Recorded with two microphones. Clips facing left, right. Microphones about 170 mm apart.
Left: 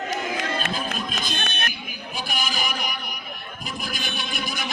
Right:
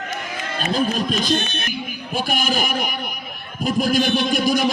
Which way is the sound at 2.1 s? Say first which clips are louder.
Right 8 dB; 45° right (ahead or behind).